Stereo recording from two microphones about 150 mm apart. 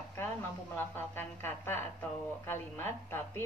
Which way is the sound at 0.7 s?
15° left (ahead or behind).